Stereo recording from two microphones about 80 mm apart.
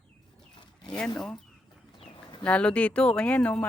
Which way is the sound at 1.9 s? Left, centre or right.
Left.